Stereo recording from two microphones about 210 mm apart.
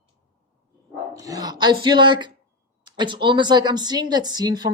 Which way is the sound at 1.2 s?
15° right (ahead or behind).